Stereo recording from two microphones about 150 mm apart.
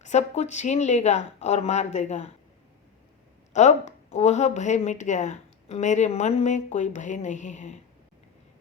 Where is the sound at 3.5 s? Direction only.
50° left (ahead or behind).